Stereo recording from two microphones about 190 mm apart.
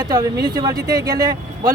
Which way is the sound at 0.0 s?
20° right (ahead or behind).